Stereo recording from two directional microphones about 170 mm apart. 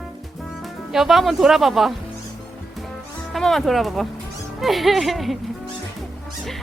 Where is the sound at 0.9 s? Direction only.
Centre (ahead or behind).